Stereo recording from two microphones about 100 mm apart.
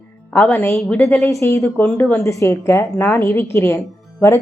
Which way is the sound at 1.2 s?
30° left (ahead or behind).